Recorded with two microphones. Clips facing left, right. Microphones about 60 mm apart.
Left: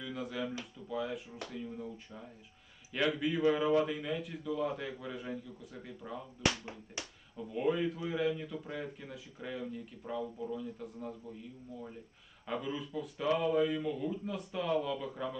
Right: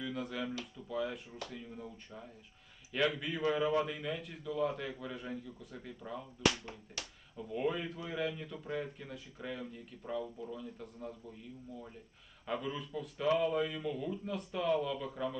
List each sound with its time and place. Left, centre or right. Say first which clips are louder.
0.0 s a man's voice: even; centre
7.0 s speech: left 2 dB; left
7.5 s a man's voice: left 3 dB; centre
12.5 s a man's voice: left 1 dB; centre